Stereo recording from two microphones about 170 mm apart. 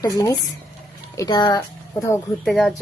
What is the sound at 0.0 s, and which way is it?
A woman's voice, 20° left (ahead or behind).